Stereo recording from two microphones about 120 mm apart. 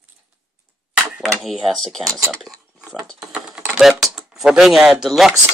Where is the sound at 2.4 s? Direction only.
Centre (ahead or behind).